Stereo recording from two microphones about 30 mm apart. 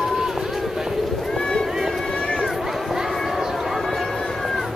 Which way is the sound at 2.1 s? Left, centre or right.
Left.